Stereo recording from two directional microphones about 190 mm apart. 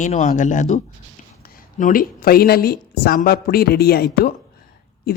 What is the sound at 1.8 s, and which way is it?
Speech, 50° left (ahead or behind).